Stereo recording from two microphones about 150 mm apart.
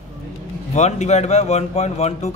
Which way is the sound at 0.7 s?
50° left (ahead or behind).